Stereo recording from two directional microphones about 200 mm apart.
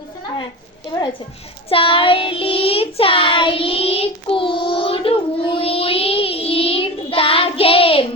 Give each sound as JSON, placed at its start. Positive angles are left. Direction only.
{"t": 1.7, "sound": "child singing", "side_deg": 25}